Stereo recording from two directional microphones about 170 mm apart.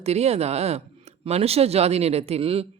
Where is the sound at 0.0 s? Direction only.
40° right (ahead or behind).